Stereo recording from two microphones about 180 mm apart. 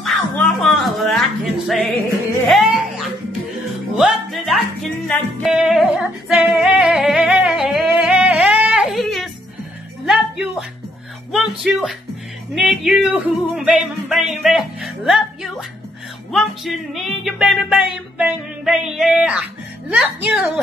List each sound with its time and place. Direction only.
0.0 s music: centre (ahead or behind)
3.9 s music: centre (ahead or behind)
8.0 s yodeling: 5° right (ahead or behind)
10.0 s music: 5° right (ahead or behind)
11.3 s speech: centre (ahead or behind)
12.5 s music: centre (ahead or behind)
19.9 s a woman's voice: 5° right (ahead or behind)